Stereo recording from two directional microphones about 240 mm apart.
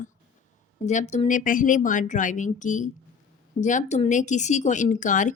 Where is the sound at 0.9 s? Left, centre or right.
Left.